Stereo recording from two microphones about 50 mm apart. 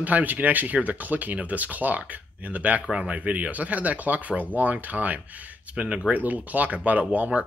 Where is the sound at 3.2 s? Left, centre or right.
Right.